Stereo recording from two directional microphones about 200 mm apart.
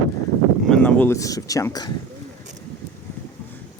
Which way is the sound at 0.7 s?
5° left (ahead or behind).